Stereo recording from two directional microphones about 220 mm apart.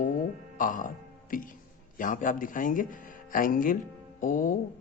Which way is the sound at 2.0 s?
35° left (ahead or behind).